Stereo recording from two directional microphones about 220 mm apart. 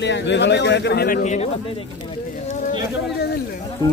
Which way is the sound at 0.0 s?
55° left (ahead or behind).